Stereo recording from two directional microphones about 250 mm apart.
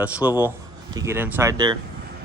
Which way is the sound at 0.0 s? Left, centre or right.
Centre.